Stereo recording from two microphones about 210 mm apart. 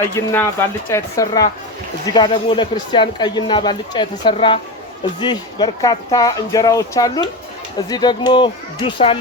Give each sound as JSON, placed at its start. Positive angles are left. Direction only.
{"t": 0.0, "sound": "speech", "side_deg": 10}